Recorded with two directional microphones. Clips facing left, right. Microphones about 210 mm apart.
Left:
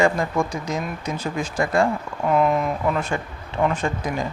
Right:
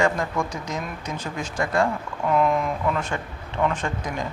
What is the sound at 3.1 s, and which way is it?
Speech, 15° left (ahead or behind).